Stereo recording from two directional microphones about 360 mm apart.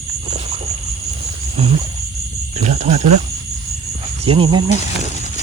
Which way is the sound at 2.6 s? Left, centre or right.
Centre.